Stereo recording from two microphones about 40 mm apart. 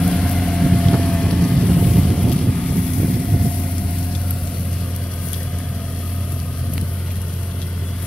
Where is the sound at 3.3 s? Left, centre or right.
Left.